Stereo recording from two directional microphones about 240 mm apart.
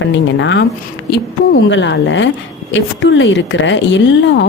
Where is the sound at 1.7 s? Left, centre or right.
Left.